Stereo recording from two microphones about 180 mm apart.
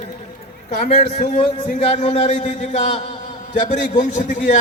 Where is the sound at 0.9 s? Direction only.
40° left (ahead or behind).